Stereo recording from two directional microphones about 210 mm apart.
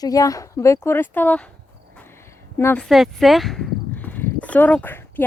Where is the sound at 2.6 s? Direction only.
5° left (ahead or behind).